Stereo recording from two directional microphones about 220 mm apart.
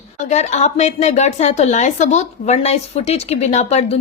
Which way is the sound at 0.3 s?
30° left (ahead or behind).